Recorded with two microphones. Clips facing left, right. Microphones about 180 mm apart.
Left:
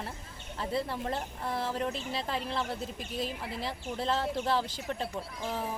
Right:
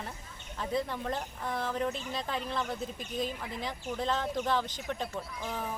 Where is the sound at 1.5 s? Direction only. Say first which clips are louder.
Left 1 dB; 30° left (ahead or behind).